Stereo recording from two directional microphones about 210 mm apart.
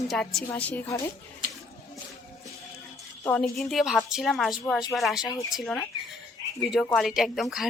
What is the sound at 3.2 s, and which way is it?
A woman's voice, 5° left (ahead or behind).